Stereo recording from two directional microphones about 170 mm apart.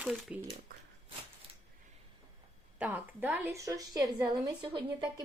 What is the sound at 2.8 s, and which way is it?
A woman's voice, 10° right (ahead or behind).